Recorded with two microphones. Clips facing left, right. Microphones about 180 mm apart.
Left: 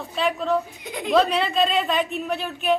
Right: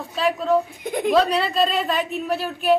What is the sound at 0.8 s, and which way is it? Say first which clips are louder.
Speech: right 7 dB; 50° right (ahead or behind).